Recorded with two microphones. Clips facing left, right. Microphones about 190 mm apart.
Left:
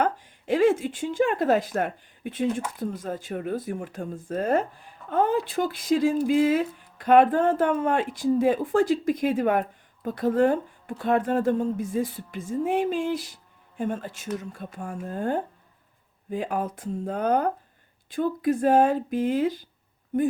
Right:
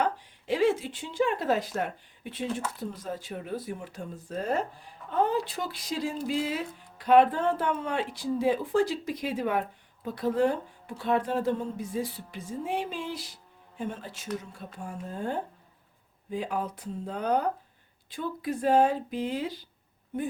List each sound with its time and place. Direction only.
0.0 s speech: 50° left (ahead or behind)